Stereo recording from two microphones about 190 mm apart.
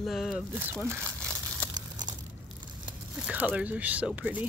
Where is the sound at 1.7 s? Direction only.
20° right (ahead or behind).